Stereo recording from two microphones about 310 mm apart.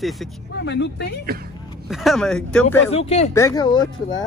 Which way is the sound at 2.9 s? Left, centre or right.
Centre.